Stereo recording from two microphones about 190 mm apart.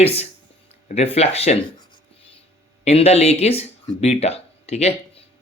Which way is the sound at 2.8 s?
35° left (ahead or behind).